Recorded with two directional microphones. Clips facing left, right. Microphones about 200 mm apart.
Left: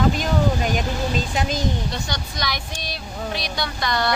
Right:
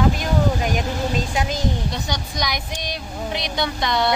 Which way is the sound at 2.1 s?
15° right (ahead or behind).